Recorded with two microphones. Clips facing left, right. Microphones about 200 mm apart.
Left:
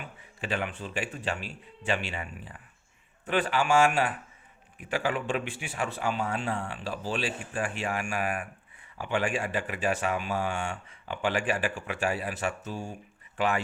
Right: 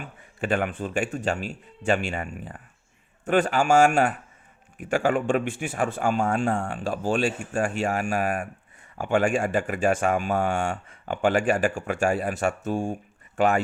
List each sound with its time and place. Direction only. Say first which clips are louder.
0.0 s speech: right 7 dB; 50° right (ahead or behind)